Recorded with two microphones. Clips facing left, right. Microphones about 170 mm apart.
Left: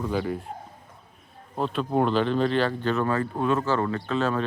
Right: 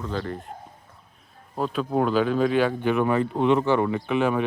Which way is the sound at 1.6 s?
5° right (ahead or behind).